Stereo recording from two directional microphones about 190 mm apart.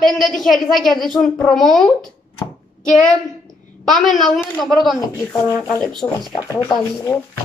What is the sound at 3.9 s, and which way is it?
Speech, centre (ahead or behind).